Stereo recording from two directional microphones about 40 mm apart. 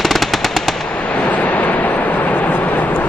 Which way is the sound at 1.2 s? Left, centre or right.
Left.